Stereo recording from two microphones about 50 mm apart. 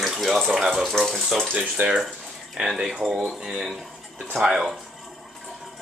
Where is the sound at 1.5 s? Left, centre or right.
Right.